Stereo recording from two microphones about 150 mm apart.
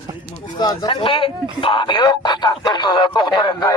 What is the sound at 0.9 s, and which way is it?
Speech, 35° left (ahead or behind).